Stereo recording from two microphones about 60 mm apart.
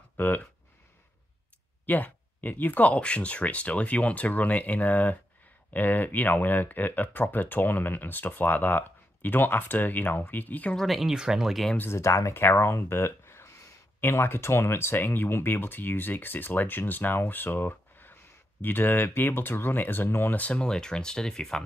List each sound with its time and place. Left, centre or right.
1.9 s speech: left
10.8 s speech: centre
11.9 s speech: left
12.4 s speech: left; by 21.6 s centre